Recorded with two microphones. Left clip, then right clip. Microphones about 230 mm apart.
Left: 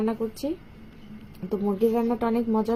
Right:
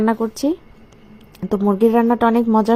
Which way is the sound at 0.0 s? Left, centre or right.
Right.